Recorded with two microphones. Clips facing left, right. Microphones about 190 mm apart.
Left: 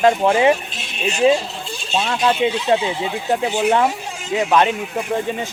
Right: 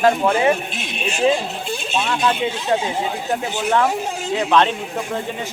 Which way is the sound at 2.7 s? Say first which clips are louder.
Left 2 dB; 45° right (ahead or behind).